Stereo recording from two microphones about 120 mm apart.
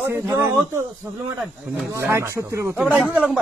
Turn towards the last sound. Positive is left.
turn(degrees=-10)  # may be behind; listen again after turning